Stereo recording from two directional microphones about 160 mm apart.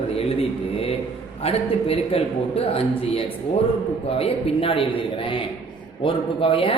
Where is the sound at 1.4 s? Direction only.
40° left (ahead or behind).